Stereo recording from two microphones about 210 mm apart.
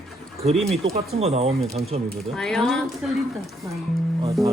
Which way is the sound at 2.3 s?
Centre (ahead or behind).